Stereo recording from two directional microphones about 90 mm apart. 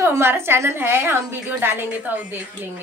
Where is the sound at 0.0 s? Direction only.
30° right (ahead or behind).